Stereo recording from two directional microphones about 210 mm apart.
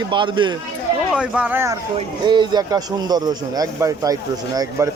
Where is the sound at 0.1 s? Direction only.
25° right (ahead or behind).